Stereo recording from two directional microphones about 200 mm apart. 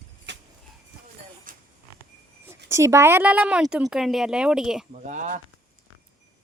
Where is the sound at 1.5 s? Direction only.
45° right (ahead or behind).